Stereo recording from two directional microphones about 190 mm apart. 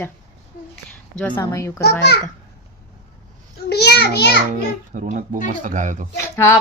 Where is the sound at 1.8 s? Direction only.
60° left (ahead or behind).